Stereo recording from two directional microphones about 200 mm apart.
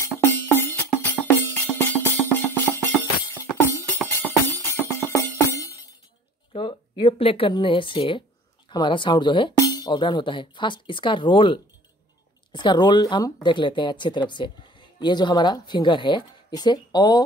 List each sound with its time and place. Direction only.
0.0 s music: 10° left (ahead or behind)
6.5 s speech: 25° left (ahead or behind)